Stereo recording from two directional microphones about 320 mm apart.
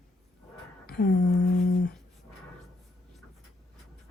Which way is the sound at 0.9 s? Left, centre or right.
Left.